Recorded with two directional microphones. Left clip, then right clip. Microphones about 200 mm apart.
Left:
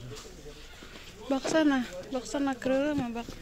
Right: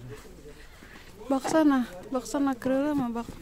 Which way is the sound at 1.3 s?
25° right (ahead or behind).